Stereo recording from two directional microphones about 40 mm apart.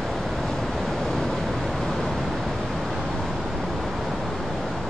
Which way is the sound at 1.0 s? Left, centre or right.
Centre.